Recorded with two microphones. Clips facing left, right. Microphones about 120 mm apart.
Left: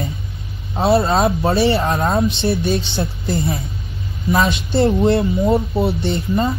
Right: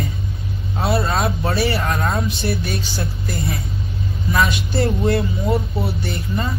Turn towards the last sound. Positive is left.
turn(degrees=25)  # may be behind; listen again after turning